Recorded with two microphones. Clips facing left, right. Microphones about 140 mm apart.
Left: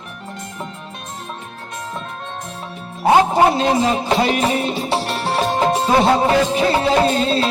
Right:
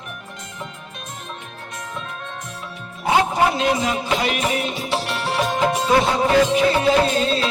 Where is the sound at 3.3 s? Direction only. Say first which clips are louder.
Left 4 dB; 30° left (ahead or behind).